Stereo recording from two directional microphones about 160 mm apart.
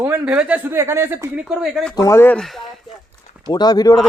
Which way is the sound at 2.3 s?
Centre (ahead or behind).